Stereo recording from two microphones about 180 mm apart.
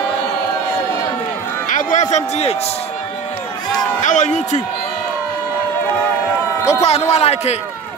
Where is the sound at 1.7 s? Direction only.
45° left (ahead or behind).